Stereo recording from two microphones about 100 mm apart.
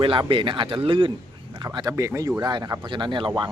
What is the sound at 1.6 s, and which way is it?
Speech, 45° right (ahead or behind).